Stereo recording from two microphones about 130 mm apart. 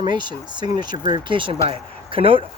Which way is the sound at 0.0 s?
35° right (ahead or behind).